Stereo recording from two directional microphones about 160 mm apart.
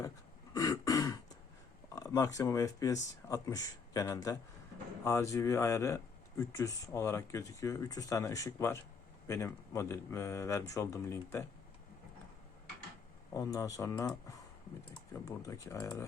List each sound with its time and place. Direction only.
0.5 s throat clearing: 20° left (ahead or behind)
2.0 s speech: 20° left (ahead or behind)
13.3 s speech: 20° left (ahead or behind)